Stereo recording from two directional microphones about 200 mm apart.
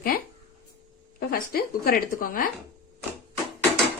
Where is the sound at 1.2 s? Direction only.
50° left (ahead or behind).